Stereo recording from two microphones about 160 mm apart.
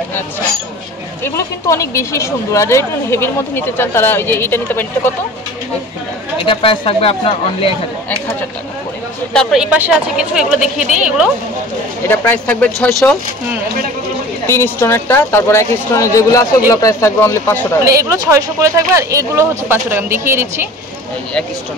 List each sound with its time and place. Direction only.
1.2 s speech: 20° left (ahead or behind)
6.4 s speech: 35° left (ahead or behind)
9.3 s a woman's voice: centre (ahead or behind)
12.1 s speech: 10° left (ahead or behind)
14.5 s speech: 15° left (ahead or behind)
17.8 s speech: 20° right (ahead or behind)